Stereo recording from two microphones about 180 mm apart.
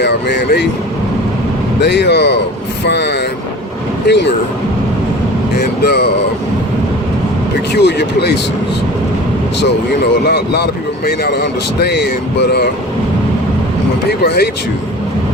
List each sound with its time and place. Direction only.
0.0 s speech: 70° left (ahead or behind)
1.8 s speech: 70° left (ahead or behind)
5.5 s a sound: 65° left (ahead or behind)
7.7 s speech: 70° left (ahead or behind)
10.2 s a man's voice: 65° left (ahead or behind)
14.1 s a man's voice: 65° left (ahead or behind)